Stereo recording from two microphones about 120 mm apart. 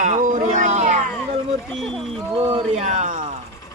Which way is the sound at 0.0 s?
90° right.